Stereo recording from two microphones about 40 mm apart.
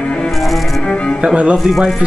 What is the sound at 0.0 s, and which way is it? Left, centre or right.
Cello, left.